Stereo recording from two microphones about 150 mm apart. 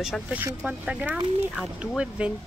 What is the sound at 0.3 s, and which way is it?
A woman's voice, 10° right (ahead or behind).